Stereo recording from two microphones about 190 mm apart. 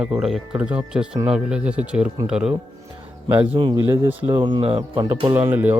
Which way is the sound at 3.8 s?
15° right (ahead or behind).